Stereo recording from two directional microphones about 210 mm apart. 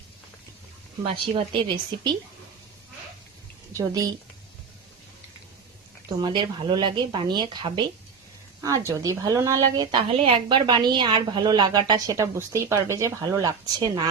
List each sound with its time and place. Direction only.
1.1 s speech: 25° right (ahead or behind)
3.7 s a woman's voice: 15° right (ahead or behind)
6.1 s a woman's voice: 20° right (ahead or behind)